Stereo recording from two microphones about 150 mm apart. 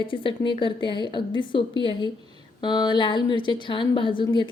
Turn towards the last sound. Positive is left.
turn(degrees=35)  # may be behind; listen again after turning